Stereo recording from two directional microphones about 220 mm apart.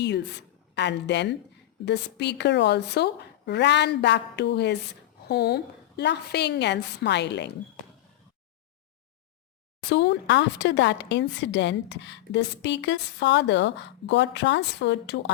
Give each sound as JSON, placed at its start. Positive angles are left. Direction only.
{"t": 0.8, "sound": "speech", "side_deg": 50}
{"t": 9.9, "sound": "speech", "side_deg": 55}